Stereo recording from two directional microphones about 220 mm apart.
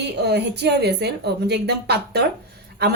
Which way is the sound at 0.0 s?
50° right (ahead or behind).